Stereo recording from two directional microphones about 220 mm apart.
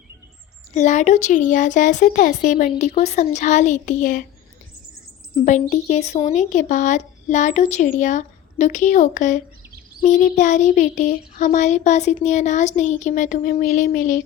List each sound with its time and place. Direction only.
0.7 s speech: 30° left (ahead or behind)
5.5 s speech: 35° left (ahead or behind)